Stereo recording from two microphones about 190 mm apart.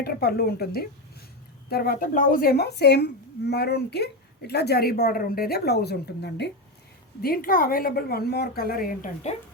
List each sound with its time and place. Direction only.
0.0 s a woman's voice: 55° left (ahead or behind)
7.2 s a woman's voice: 50° left (ahead or behind)